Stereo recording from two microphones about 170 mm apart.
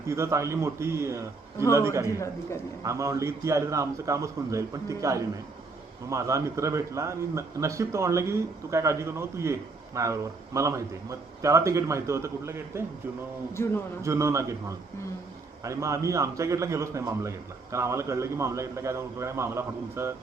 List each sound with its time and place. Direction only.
0.1 s a man's voice: 15° right (ahead or behind)
2.1 s a man's voice: 15° left (ahead or behind)
2.8 s a man's voice: 15° right (ahead or behind)
13.6 s a man's voice: 15° left (ahead or behind)
14.0 s a man's voice: 15° right (ahead or behind)
15.6 s a man's voice: 20° right (ahead or behind)